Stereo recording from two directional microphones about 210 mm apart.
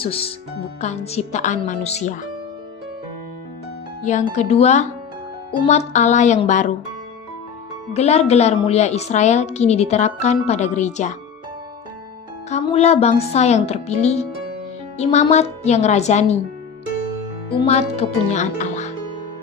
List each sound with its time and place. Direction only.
0.0 s a woman's voice: 25° left (ahead or behind)
4.0 s a woman's voice: 35° left (ahead or behind)
7.9 s a woman's voice: 30° left (ahead or behind)
12.5 s a woman's voice: 30° left (ahead or behind)
17.7 s a woman's voice: 30° left (ahead or behind)